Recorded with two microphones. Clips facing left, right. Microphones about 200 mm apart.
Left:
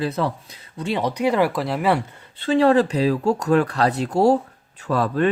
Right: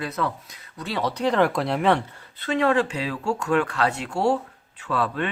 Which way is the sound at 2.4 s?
30° left (ahead or behind).